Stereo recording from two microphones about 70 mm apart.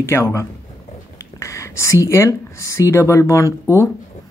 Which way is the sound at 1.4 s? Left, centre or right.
Left.